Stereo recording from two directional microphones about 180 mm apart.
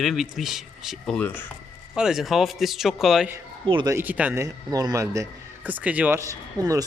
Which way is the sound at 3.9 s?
10° right (ahead or behind).